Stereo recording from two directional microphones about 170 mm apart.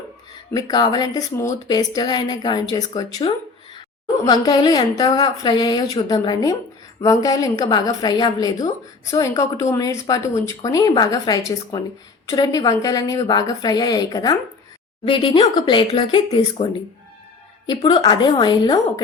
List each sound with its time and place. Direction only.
0.5 s speech: 25° left (ahead or behind)
17.7 s speech: 25° left (ahead or behind)